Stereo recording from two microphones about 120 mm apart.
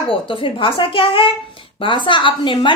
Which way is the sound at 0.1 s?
45° left (ahead or behind).